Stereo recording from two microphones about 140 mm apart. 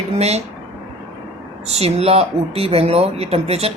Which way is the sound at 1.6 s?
45° right (ahead or behind).